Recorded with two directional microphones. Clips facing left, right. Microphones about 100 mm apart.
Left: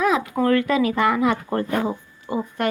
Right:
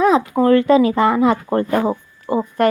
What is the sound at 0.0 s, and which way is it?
Speech, 30° right (ahead or behind).